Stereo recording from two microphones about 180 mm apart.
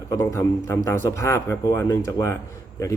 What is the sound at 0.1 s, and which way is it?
Speech, 20° left (ahead or behind).